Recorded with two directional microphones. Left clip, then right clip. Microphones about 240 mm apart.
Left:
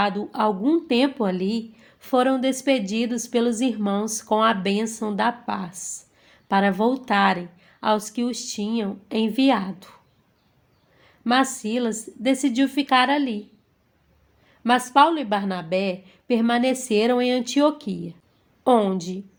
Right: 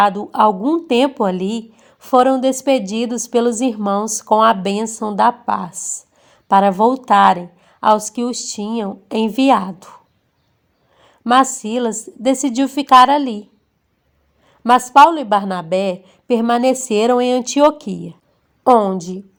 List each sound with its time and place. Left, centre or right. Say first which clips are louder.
0.0 s speech: right 9 dB; right
11.0 s speech: right 8 dB; right
14.6 s speech: right 8 dB; right